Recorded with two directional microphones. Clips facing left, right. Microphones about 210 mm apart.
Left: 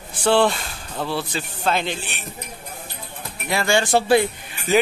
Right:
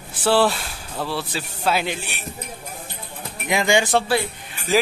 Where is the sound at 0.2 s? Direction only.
5° right (ahead or behind).